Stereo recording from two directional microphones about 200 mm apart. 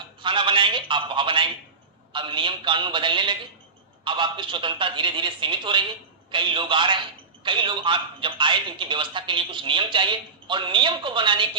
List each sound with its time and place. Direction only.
0.2 s a man's voice: 25° right (ahead or behind)